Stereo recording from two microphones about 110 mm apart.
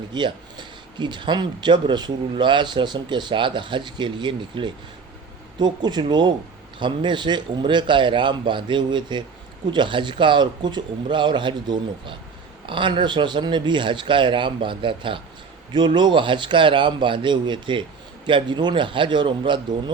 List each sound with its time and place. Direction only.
0.1 s speech: 45° right (ahead or behind)